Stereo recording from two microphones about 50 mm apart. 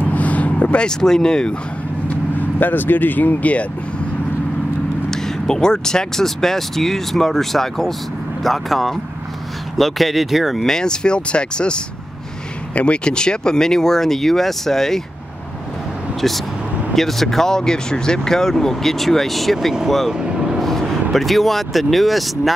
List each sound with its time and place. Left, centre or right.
0.1 s vehicle: left; by 1.5 s centre
2.0 s speech: left
5.1 s speech: centre
16.2 s speech: centre
20.1 s vehicle: centre
20.5 s speech: centre